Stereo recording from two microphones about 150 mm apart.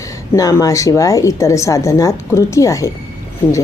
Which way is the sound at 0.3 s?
20° left (ahead or behind).